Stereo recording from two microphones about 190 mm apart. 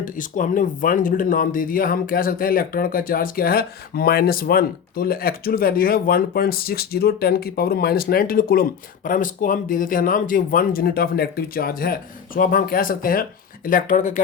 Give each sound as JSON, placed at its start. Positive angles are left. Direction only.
{"t": 0.0, "sound": "speech", "side_deg": 45}